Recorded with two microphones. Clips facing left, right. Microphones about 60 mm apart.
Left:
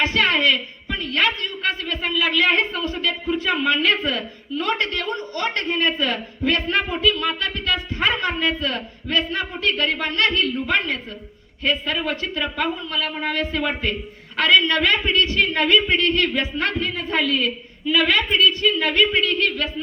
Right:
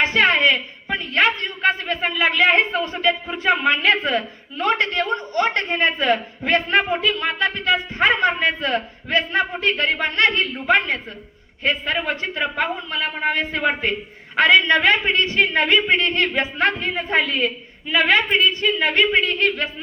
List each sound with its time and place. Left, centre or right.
0.0 s a woman's voice: right